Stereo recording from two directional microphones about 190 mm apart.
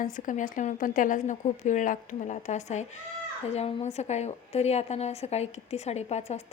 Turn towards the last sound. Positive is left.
turn(degrees=35)  # may be behind; listen again after turning